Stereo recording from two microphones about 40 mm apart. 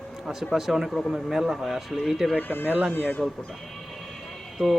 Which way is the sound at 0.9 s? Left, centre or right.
Centre.